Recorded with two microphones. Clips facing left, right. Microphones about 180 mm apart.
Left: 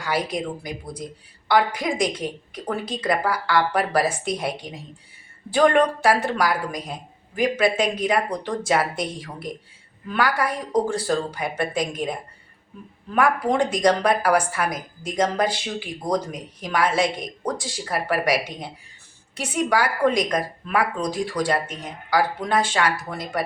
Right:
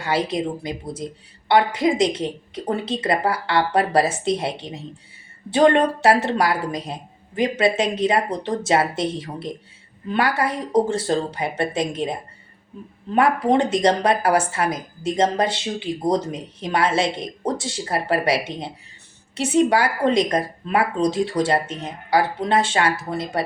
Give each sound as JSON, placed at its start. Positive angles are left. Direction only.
{"t": 0.0, "sound": "a woman's voice", "side_deg": -25}